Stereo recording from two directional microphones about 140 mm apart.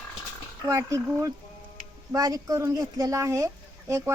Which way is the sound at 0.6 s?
25° right (ahead or behind).